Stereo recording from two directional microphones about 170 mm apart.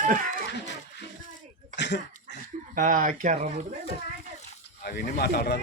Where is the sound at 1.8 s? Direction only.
90° left.